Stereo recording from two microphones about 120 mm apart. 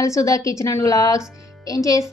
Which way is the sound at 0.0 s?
25° left (ahead or behind).